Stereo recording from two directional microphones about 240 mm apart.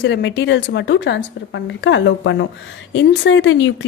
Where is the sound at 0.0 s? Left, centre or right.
Left.